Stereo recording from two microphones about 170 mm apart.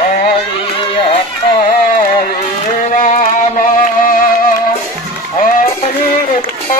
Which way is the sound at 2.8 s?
50° left (ahead or behind).